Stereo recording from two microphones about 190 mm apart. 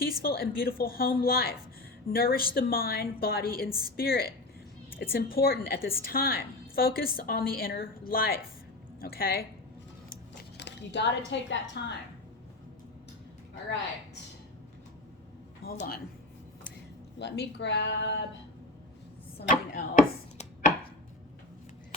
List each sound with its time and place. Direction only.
0.0 s a woman's voice: 50° left (ahead or behind)
10.6 s a sound: 65° left (ahead or behind)
11.3 s speech: 70° left (ahead or behind)
15.6 s a woman's voice: 50° left (ahead or behind)
17.2 s speech: 65° left (ahead or behind)
19.4 s a woman's voice: 45° left (ahead or behind)